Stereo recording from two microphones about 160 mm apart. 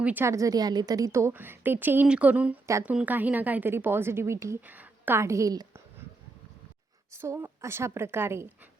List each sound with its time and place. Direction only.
0.0 s a woman's voice: 10° right (ahead or behind)
7.1 s a woman's voice: 15° right (ahead or behind)